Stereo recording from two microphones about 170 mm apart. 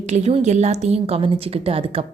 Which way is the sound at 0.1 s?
40° right (ahead or behind).